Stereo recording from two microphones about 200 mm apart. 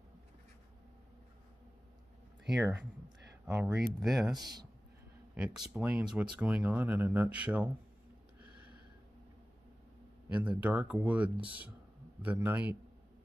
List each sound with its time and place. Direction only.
2.4 s speech: 5° right (ahead or behind)
4.3 s speech: 20° right (ahead or behind)
5.3 s speech: 5° right (ahead or behind)
8.4 s a sound: 10° right (ahead or behind)
10.2 s speech: 10° right (ahead or behind)